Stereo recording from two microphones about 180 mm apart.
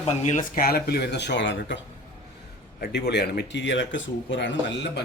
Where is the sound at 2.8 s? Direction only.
60° left (ahead or behind); by 5.0 s 80° left.